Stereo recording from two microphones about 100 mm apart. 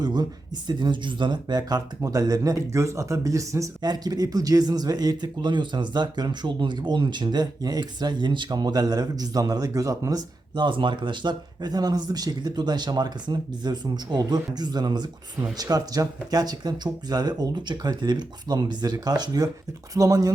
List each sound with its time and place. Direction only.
0.0 s speech: 40° right (ahead or behind)